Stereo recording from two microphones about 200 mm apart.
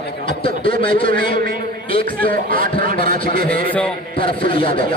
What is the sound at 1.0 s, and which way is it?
A man's voice, 45° right (ahead or behind).